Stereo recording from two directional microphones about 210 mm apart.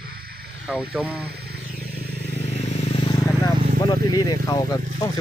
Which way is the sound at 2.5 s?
30° left (ahead or behind).